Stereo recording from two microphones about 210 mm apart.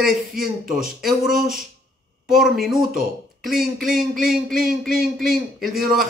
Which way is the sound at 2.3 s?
Centre (ahead or behind).